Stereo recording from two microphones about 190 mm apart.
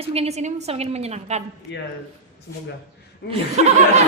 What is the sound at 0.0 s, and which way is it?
A woman's voice, 30° right (ahead or behind).